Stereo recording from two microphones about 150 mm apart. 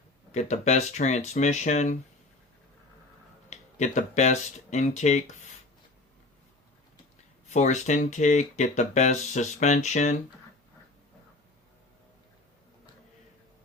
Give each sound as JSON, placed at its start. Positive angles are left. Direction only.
{"t": 0.3, "sound": "speech", "side_deg": 50}
{"t": 3.5, "sound": "speech", "side_deg": 50}
{"t": 7.5, "sound": "speech", "side_deg": 50}